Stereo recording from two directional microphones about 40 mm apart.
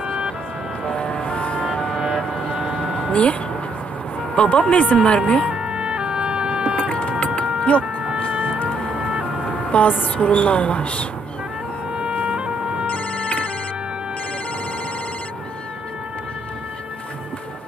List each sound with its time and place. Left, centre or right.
0.8 s music: left
2.2 s vehicle: left
2.7 s a sound: left
3.1 s speech: left
4.4 s speech: left
5.5 s music: right
6.9 s vehicle: left
7.3 s livestock: left
8.0 s music: right
8.9 s ambulance: right
9.7 s a sound: left
10.0 s speech: left
12.0 s emergency vehicle: right
12.8 s ringtone: left